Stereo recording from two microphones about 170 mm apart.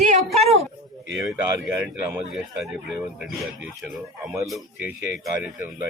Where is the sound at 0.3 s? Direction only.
40° right (ahead or behind).